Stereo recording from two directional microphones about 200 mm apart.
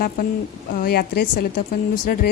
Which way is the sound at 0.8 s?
50° left (ahead or behind).